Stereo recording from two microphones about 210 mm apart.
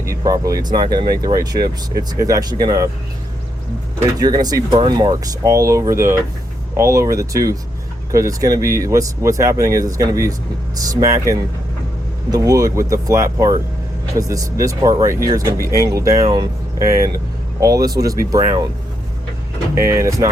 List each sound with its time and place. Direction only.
0.0 s speech: 15° right (ahead or behind)
4.2 s speech: 20° right (ahead or behind)
17.6 s speech: 15° right (ahead or behind)
19.9 s speech: 15° right (ahead or behind)